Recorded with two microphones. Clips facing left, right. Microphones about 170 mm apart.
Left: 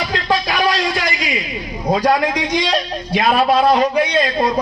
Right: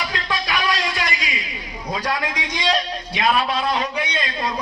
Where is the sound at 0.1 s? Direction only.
30° left (ahead or behind).